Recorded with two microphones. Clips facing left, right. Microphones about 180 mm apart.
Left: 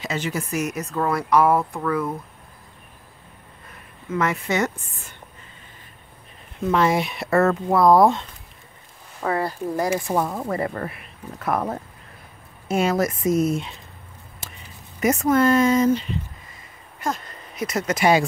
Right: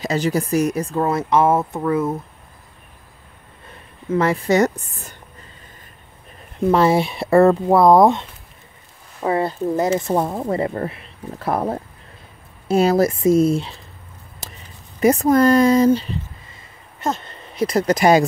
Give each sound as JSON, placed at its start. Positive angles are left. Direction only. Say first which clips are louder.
{"t": 0.0, "sound": "speech", "louder": "right 7 dB", "side_deg": -35}
{"t": 3.7, "sound": "speech", "louder": "right 6 dB", "side_deg": -30}
{"t": 6.7, "sound": "speech", "louder": "right 4 dB", "side_deg": -30}
{"t": 14.4, "sound": "a sound", "louder": "right 3 dB", "side_deg": -40}
{"t": 15.0, "sound": "speech", "louder": "right 4 dB", "side_deg": -35}